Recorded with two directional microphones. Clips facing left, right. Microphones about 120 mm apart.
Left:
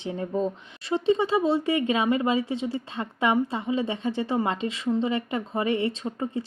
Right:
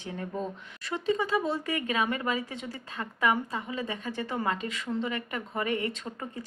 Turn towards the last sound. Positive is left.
turn(degrees=25)  # may be behind; listen again after turning